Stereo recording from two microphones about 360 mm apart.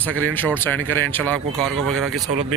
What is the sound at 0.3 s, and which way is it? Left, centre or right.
Speech, centre.